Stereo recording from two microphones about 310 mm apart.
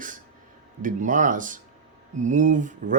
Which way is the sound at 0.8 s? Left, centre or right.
Right.